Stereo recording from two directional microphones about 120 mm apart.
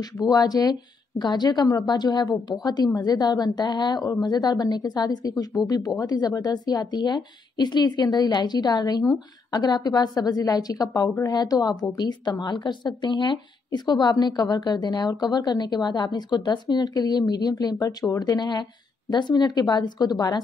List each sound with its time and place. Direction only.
0.2 s a woman's voice: 30° left (ahead or behind)